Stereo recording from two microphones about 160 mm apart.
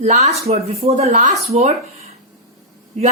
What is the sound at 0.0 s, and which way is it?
A man's voice, 45° right (ahead or behind).